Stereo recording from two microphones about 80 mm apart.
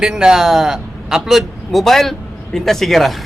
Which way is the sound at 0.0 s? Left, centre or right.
Centre.